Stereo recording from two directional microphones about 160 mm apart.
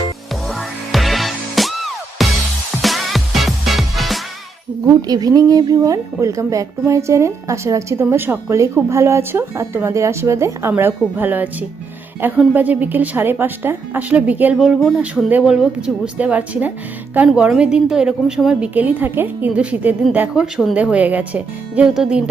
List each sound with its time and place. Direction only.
0.9 s music: centre (ahead or behind)
5.0 s speech: 25° right (ahead or behind); by 22.2 s 5° right (ahead or behind)